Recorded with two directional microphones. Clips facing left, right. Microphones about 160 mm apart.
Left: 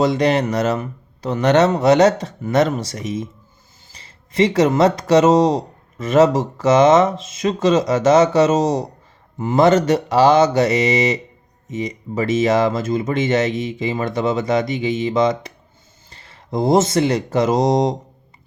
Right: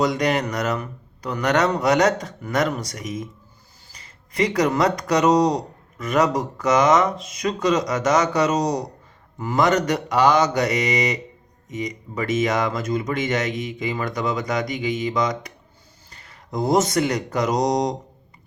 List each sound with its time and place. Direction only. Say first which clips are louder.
0.0 s speech: left 4 dB; 30° left (ahead or behind)